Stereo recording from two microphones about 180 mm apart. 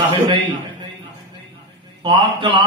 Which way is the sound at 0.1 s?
25° right (ahead or behind).